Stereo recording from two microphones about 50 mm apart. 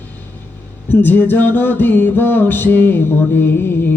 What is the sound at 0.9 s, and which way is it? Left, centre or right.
Music, left.